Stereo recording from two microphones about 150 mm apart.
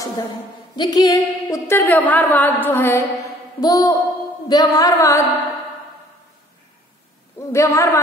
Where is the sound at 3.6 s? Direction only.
25° left (ahead or behind).